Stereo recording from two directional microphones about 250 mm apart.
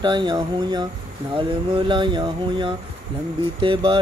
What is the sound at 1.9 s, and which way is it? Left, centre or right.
Speech, centre.